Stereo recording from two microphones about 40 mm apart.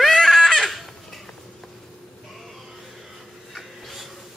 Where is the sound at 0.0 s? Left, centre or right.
Centre.